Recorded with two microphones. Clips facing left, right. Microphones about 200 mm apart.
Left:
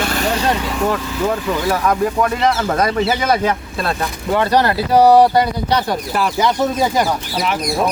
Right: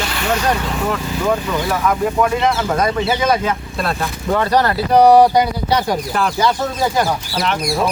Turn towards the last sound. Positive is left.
turn(degrees=0)  # may be behind; listen again after turning